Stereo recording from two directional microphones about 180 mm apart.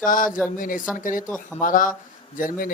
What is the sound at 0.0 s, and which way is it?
Speech, 50° left (ahead or behind).